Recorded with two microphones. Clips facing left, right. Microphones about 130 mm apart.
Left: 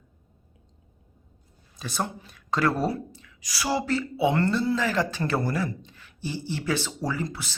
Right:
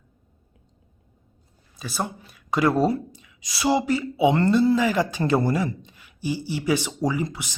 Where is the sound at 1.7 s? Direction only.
5° right (ahead or behind).